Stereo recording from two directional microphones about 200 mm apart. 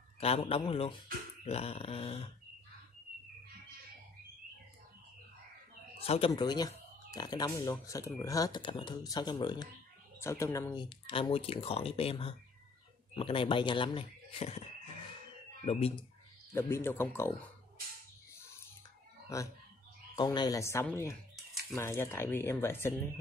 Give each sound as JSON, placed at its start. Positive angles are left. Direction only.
{"t": 0.2, "sound": "speech", "side_deg": 30}
{"t": 6.0, "sound": "speech", "side_deg": 30}
{"t": 15.6, "sound": "speech", "side_deg": 25}
{"t": 16.5, "sound": "speech", "side_deg": 10}
{"t": 19.2, "sound": "speech", "side_deg": 15}